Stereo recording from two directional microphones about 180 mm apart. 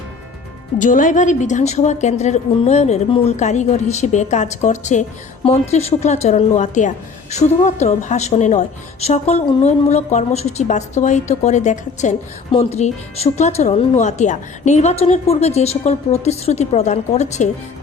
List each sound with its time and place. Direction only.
0.8 s a woman's voice: 45° left (ahead or behind)